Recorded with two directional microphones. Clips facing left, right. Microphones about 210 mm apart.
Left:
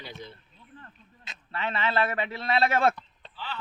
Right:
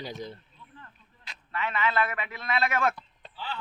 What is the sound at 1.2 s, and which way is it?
A man's voice, 30° left (ahead or behind).